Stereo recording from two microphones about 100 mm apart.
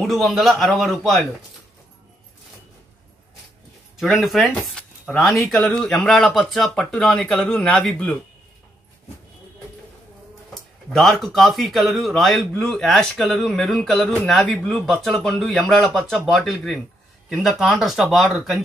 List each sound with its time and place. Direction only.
0.0 s speech: centre (ahead or behind)
3.9 s speech: 5° right (ahead or behind)
10.9 s speech: centre (ahead or behind)